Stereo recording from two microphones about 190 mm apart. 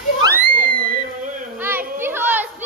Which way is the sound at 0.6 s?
50° right (ahead or behind).